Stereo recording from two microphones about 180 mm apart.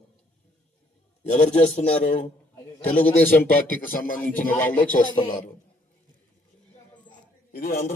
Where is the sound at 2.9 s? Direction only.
10° left (ahead or behind).